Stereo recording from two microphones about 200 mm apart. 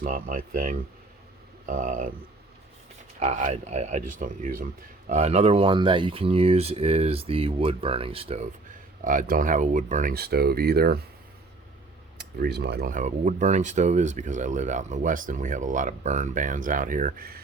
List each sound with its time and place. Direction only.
0.0 s speech: 45° right (ahead or behind)
3.2 s speech: 35° right (ahead or behind)
9.0 s speech: 45° right (ahead or behind)
12.1 s speech: 55° right (ahead or behind)